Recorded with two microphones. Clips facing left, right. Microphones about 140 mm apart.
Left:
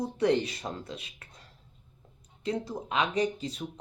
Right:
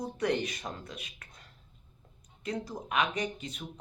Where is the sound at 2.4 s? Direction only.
25° left (ahead or behind).